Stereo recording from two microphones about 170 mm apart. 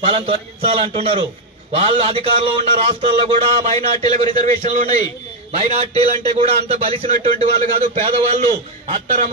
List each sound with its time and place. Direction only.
0.0 s a man's voice: 30° right (ahead or behind)